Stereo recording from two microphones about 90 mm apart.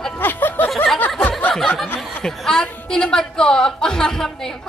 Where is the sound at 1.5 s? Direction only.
5° left (ahead or behind).